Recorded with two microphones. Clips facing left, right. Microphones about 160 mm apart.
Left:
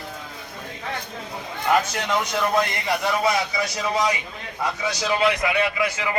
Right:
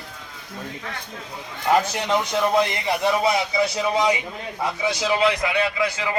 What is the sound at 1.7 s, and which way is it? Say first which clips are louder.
Speech: right 1 dB; 30° right (ahead or behind).